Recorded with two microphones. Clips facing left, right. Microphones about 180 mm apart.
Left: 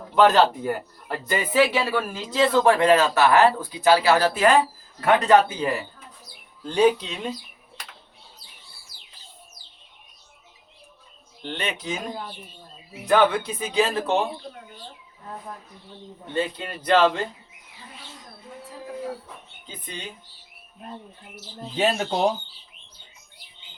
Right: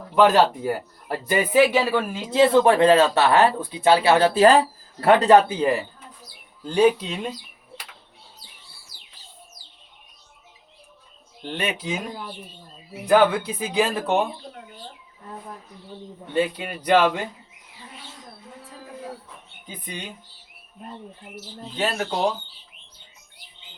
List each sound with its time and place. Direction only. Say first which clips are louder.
0.2 s speech: right 1 dB; 10° right (ahead or behind); by 5.7 s 30° right (ahead or behind)
6.7 s speech: right 1 dB; 10° right (ahead or behind)
11.5 s speech: right 2 dB; 10° right (ahead or behind)
13.1 s speech: right 2 dB; 10° right (ahead or behind)
16.3 s speech: right 3 dB; 15° right (ahead or behind)
19.6 s speech: right 3 dB; 15° right (ahead or behind)
21.8 s speech: left 3 dB; 20° left (ahead or behind)